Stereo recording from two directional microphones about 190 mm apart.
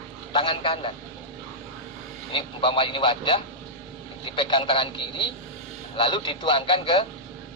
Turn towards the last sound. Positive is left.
turn(degrees=25)  # may be behind; listen again after turning